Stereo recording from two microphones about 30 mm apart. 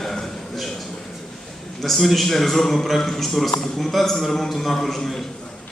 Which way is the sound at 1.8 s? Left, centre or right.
Centre.